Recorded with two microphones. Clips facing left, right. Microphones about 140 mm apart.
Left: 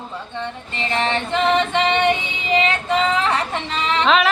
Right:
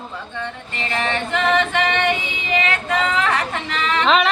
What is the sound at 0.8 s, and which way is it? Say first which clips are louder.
Female singing: left 2 dB; 25° left (ahead or behind).